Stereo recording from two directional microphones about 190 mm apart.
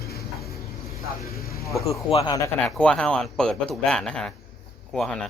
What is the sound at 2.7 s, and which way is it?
Speech, 5° left (ahead or behind).